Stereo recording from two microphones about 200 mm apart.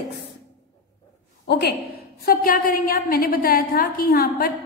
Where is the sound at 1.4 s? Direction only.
55° left (ahead or behind).